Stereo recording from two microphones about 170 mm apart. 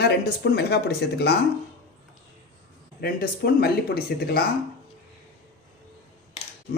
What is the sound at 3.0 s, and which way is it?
Speech, 65° left (ahead or behind).